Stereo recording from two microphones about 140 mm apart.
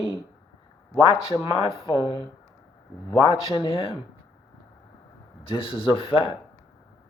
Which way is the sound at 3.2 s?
35° left (ahead or behind).